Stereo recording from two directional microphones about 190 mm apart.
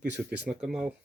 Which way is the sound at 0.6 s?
5° right (ahead or behind).